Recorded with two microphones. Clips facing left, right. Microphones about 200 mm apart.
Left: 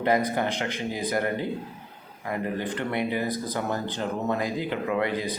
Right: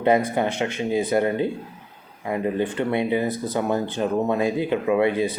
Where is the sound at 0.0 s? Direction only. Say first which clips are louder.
Right 4 dB; 25° right (ahead or behind).